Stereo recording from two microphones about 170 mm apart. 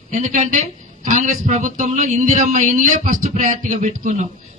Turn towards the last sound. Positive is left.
turn(degrees=-45)  # may be behind; listen again after turning